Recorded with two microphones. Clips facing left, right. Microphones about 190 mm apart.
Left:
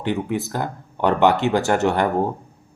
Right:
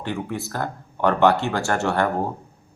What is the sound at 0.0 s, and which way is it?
Speech, 20° left (ahead or behind).